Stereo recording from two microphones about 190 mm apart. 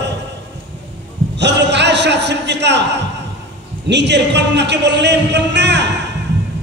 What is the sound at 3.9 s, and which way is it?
A man's voice, 65° right (ahead or behind).